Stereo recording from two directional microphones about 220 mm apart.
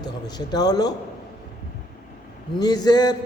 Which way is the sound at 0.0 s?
20° left (ahead or behind).